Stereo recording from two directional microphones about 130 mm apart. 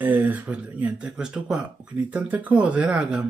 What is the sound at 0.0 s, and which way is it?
Speech, 10° right (ahead or behind).